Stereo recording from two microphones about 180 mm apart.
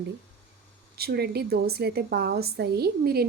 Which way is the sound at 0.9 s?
60° right (ahead or behind).